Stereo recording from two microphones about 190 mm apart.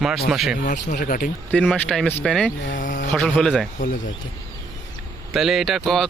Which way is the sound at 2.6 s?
45° left (ahead or behind).